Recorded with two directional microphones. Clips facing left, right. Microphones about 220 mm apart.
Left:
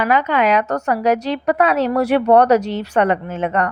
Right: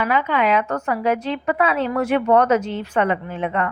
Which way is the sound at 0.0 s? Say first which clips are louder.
Left 3 dB; 75° left (ahead or behind).